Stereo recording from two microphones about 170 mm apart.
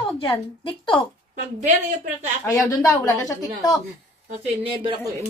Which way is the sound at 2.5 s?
20° left (ahead or behind).